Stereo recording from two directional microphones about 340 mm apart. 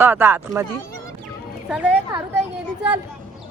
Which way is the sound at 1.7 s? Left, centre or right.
Centre.